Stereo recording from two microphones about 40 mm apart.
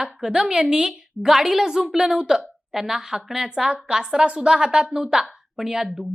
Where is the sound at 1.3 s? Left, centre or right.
Centre.